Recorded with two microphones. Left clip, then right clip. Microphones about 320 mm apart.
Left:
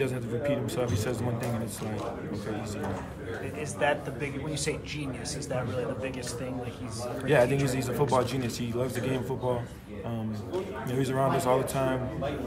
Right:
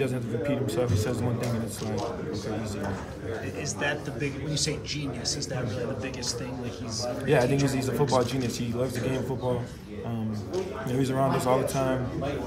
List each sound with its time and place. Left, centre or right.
0.0 s a man's voice: centre
3.8 s a man's voice: centre
7.2 s a man's voice: centre
10.9 s a man's voice: centre